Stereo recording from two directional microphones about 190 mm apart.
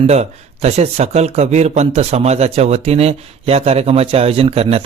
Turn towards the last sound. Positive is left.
turn(degrees=-30)  # may be behind; listen again after turning